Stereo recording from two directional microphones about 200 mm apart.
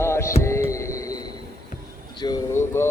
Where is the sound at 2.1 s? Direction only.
20° left (ahead or behind).